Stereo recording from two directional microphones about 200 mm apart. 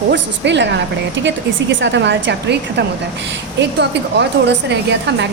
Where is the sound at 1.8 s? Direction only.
60° right (ahead or behind).